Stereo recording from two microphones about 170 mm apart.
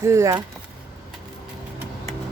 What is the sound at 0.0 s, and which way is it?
Speech, 15° right (ahead or behind).